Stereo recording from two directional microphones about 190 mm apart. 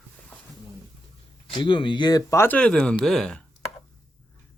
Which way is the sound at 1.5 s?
25° left (ahead or behind).